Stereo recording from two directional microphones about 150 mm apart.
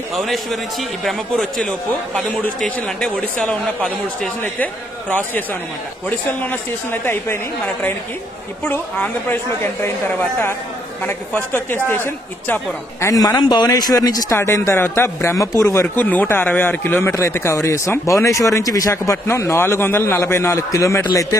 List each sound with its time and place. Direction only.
0.1 s a man's voice: centre (ahead or behind)
13.0 s a man's voice: 25° left (ahead or behind)